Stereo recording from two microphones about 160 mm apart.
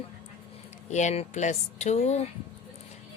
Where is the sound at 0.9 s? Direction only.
45° left (ahead or behind).